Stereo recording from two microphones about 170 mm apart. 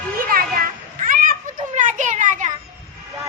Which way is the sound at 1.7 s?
45° right (ahead or behind).